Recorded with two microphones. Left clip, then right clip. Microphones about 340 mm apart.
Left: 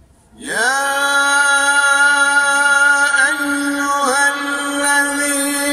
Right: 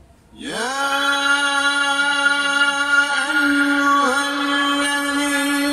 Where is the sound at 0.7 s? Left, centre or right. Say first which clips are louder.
Left 3 dB; left.